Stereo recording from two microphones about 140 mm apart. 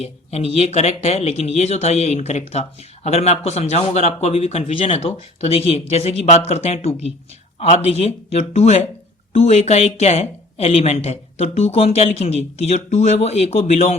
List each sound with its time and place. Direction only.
0.0 s speech: 45° left (ahead or behind)